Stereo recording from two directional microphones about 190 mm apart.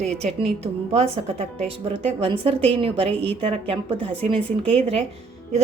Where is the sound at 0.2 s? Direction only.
35° right (ahead or behind).